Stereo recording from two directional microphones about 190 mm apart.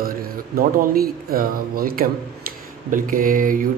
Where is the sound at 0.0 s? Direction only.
50° right (ahead or behind).